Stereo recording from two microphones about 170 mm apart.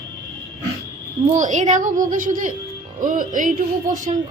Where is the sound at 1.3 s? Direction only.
45° right (ahead or behind).